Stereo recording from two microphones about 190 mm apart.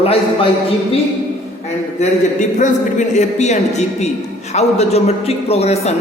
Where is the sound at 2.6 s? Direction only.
40° left (ahead or behind).